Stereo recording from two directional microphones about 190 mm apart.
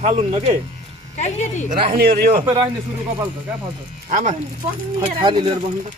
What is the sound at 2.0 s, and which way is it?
Speech, 50° right (ahead or behind).